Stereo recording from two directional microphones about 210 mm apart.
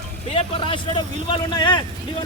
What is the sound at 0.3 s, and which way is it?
Speech, 25° left (ahead or behind).